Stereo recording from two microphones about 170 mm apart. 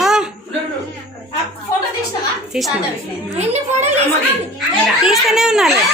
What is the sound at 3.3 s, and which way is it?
Speech, 40° right (ahead or behind).